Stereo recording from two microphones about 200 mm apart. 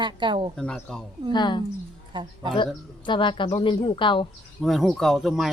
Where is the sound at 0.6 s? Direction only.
5° left (ahead or behind).